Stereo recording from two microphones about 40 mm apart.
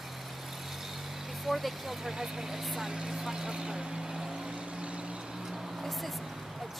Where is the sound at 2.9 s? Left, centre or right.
Centre.